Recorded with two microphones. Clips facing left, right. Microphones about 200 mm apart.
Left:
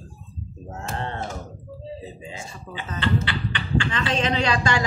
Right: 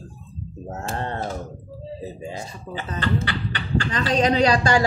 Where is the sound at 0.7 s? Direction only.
35° right (ahead or behind).